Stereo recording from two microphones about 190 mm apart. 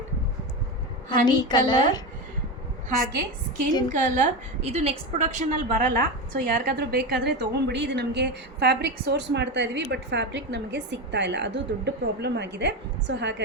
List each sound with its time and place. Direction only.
1.2 s a woman's voice: 20° left (ahead or behind)
3.9 s a woman's voice: 45° right (ahead or behind); by 13.3 s 65° right (ahead or behind)